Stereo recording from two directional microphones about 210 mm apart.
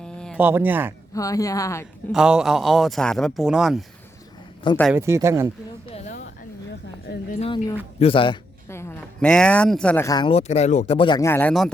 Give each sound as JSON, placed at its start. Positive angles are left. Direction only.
{"t": 0.0, "sound": "a sound", "side_deg": 5}
{"t": 0.3, "sound": "speech", "side_deg": -10}
{"t": 1.1, "sound": "speech", "side_deg": 15}
{"t": 2.1, "sound": "speech", "side_deg": -5}
{"t": 4.9, "sound": "speech", "side_deg": -15}
{"t": 7.3, "sound": "speech", "side_deg": 25}
{"t": 8.7, "sound": "speech", "side_deg": 10}